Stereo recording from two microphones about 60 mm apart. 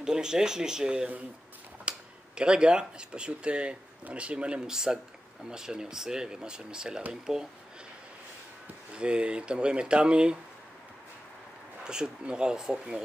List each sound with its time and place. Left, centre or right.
0.0 s speech: centre
8.9 s speech: centre
11.8 s speech: centre